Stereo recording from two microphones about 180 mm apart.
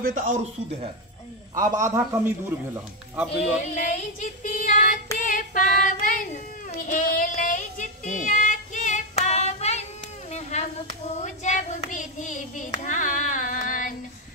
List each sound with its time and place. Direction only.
0.0 s speech: 45° right (ahead or behind)
1.5 s a man's voice: 20° right (ahead or behind)
3.3 s a sound: 40° left (ahead or behind)
5.2 s female singing: 50° left (ahead or behind)
10.3 s clapping: 40° left (ahead or behind)